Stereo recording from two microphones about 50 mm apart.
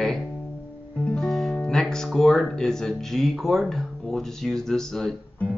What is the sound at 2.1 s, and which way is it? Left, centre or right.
Speech, centre.